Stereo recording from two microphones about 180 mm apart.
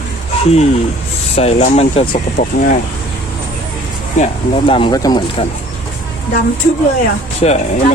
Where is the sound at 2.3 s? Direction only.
45° left (ahead or behind).